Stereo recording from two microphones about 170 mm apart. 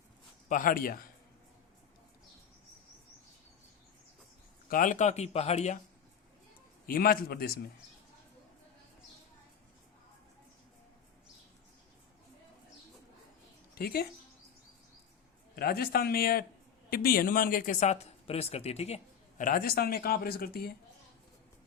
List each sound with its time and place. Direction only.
0.4 s speech: 55° left (ahead or behind)
4.7 s speech: 50° left (ahead or behind)
6.8 s speech: 60° left (ahead or behind)
13.7 s speech: 65° left (ahead or behind)
15.5 s speech: 65° left (ahead or behind); by 18.9 s 40° left (ahead or behind)
19.4 s speech: 55° left (ahead or behind)